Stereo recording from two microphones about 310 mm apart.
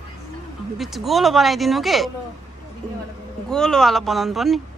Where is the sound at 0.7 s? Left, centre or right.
Centre.